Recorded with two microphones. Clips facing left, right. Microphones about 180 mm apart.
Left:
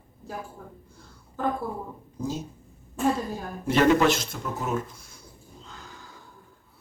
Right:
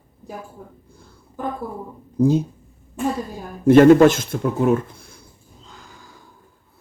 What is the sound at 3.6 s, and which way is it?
Speech, 50° right (ahead or behind).